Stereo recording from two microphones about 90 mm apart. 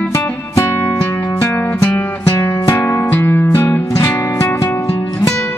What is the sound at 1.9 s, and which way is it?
Music, 20° left (ahead or behind).